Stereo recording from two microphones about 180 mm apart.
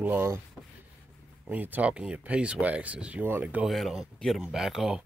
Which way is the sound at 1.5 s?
10° right (ahead or behind).